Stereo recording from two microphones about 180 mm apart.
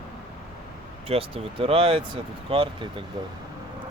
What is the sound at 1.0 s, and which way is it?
Speech, 30° right (ahead or behind).